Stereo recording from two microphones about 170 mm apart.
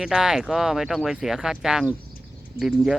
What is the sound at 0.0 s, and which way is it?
Speech, 5° right (ahead or behind).